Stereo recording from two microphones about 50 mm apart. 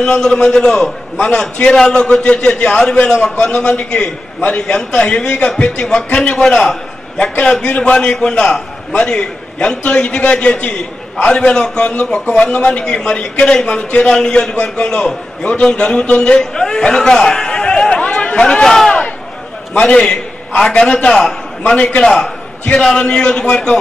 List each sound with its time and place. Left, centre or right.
0.0 s a man's voice: centre
2.2 s a man's voice: left
6.3 s a man's voice: centre
7.6 s a man's voice: left
21.7 s a man's voice: left
22.0 s a man's voice: centre